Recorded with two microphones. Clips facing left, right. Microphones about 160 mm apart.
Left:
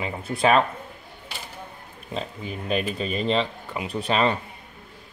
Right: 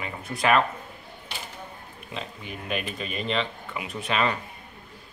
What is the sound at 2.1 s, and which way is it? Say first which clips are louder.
Speech: left 5 dB; 35° left (ahead or behind).